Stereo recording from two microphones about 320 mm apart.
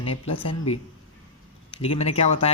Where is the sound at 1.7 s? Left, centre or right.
Centre.